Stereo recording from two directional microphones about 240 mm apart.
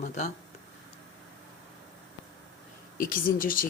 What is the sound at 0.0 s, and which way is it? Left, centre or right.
Speech, left.